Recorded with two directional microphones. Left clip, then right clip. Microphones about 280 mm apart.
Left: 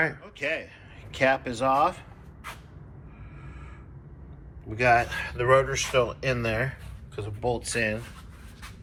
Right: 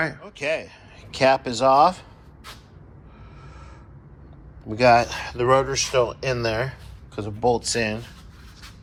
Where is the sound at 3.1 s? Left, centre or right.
Centre.